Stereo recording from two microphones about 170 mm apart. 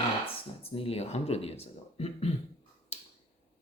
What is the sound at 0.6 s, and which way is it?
Speech, 35° left (ahead or behind).